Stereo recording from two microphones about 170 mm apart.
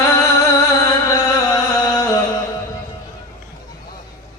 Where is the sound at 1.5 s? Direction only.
20° left (ahead or behind).